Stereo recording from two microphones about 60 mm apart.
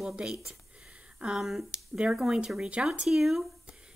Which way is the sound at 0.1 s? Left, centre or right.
Centre.